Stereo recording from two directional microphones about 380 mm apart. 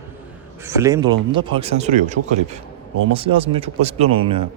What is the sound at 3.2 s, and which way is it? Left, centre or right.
Speech, centre.